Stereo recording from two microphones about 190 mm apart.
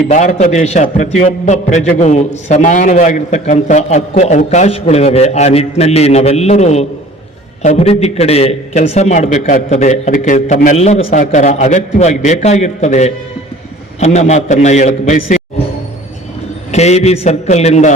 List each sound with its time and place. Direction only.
0.1 s a man's voice: 40° left (ahead or behind)
16.7 s a man's voice: 35° left (ahead or behind)